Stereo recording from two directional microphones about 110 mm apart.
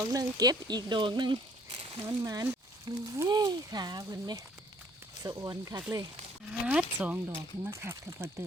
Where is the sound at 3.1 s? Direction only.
30° right (ahead or behind).